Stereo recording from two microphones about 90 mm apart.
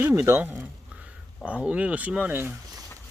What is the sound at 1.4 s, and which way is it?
Speech, 15° right (ahead or behind).